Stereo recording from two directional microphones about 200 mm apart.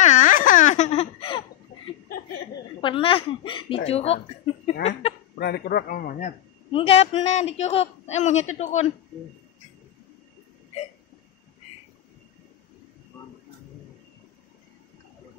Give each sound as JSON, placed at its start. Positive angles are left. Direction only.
{"t": 0.0, "sound": "baby laughter", "side_deg": 40}
{"t": 2.8, "sound": "a man's voice", "side_deg": 25}
{"t": 5.4, "sound": "a man's voice", "side_deg": 50}
{"t": 6.7, "sound": "a man's voice", "side_deg": 30}